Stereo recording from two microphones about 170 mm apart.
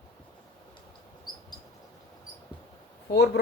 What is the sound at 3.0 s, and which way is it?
Speech, 80° left.